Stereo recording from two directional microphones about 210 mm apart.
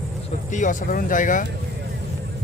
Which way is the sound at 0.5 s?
35° left (ahead or behind).